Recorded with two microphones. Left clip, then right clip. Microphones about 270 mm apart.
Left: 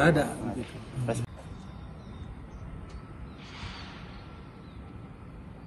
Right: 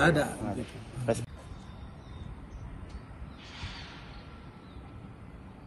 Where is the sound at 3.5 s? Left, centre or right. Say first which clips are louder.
Left 1 dB; left.